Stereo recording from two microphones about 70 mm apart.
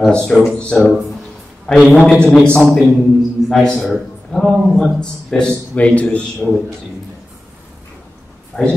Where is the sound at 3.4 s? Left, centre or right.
Centre.